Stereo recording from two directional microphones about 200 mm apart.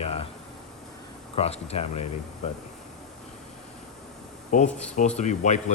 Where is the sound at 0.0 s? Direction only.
30° left (ahead or behind).